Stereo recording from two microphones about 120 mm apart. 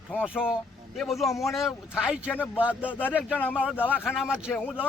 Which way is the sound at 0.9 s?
Centre (ahead or behind).